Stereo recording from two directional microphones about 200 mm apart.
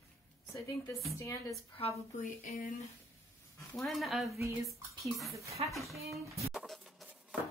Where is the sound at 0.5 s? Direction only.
15° left (ahead or behind).